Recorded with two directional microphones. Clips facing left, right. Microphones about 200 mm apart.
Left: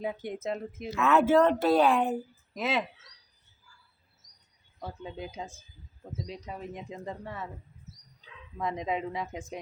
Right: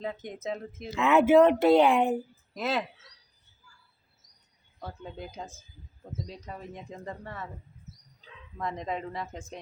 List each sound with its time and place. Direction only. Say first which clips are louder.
0.0 s speech: left 2 dB; 10° left (ahead or behind)
0.9 s speech: right 3 dB; 20° right (ahead or behind)
2.6 s speech: even; 10° left (ahead or behind)
5.0 s speech: left 2 dB; centre (ahead or behind)
8.5 s speech: left 2 dB; centre (ahead or behind)